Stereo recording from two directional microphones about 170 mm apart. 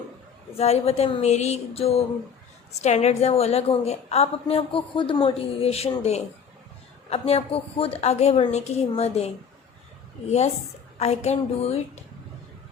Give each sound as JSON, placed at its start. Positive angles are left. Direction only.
{"t": 0.5, "sound": "a woman's voice", "side_deg": 35}